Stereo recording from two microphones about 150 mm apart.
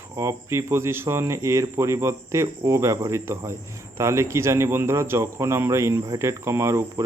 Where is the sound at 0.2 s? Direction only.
20° right (ahead or behind).